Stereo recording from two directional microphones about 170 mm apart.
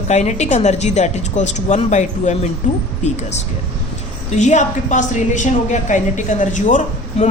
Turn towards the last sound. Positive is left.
turn(degrees=45)  # may be behind; listen again after turning